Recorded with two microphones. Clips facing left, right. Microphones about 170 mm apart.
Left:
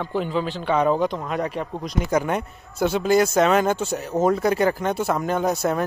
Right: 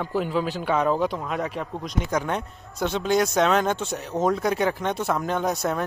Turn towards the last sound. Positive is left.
turn(degrees=0)  # may be behind; listen again after turning